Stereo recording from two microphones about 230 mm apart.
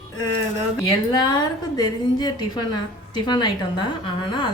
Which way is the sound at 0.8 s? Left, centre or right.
Centre.